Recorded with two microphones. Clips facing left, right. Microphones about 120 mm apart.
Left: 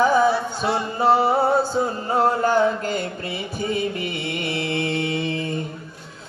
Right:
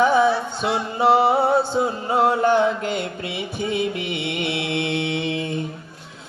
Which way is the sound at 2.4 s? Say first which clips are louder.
Right 1 dB; 35° left (ahead or behind).